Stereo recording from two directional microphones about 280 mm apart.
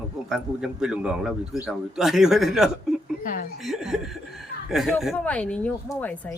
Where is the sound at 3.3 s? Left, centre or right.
Left.